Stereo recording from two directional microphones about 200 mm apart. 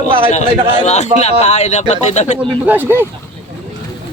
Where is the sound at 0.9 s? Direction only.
35° left (ahead or behind).